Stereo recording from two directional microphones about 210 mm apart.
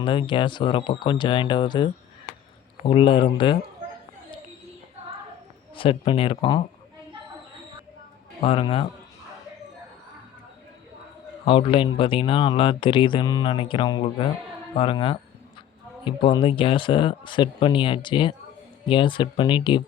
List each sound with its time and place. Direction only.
0.0 s speech: 25° left (ahead or behind)
5.7 s speech: 25° left (ahead or behind)
8.4 s speech: 25° left (ahead or behind)
11.4 s speech: 25° left (ahead or behind)